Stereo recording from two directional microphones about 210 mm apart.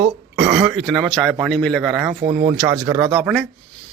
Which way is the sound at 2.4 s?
10° right (ahead or behind).